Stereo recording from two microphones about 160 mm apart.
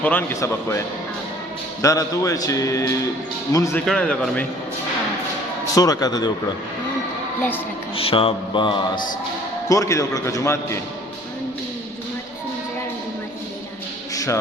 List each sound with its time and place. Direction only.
0.0 s a man's voice: 10° left (ahead or behind)
3.8 s speech: 5° left (ahead or behind)
5.7 s speech: 20° left (ahead or behind)
7.9 s speech: 35° left (ahead or behind)
9.6 s speech: 20° left (ahead or behind)
14.1 s music: 20° left (ahead or behind)